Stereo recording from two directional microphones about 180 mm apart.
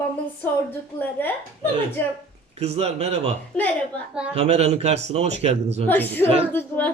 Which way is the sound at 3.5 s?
5° left (ahead or behind).